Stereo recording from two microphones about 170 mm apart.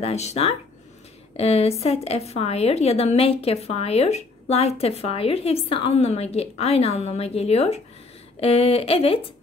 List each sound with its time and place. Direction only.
0.0 s speech: 40° left (ahead or behind)